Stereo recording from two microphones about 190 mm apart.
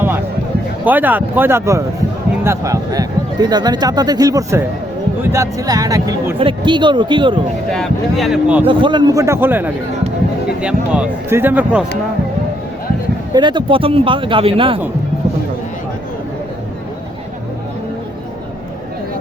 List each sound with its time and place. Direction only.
0.9 s speech: 10° right (ahead or behind); by 7.4 s 25° right (ahead or behind)
7.7 s speech: centre (ahead or behind)
8.6 s speech: 25° right (ahead or behind); by 11.9 s 5° right (ahead or behind)
13.3 s speech: 25° right (ahead or behind)